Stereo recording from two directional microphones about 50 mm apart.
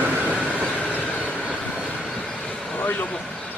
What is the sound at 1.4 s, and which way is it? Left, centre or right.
Vehicle, centre.